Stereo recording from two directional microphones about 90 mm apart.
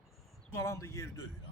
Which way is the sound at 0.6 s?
35° left (ahead or behind).